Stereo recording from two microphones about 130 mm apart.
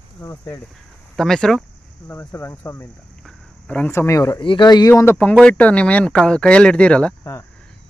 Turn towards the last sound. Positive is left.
turn(degrees=10)  # may be behind; listen again after turning